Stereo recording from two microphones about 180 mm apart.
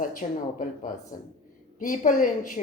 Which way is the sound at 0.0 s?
50° left (ahead or behind).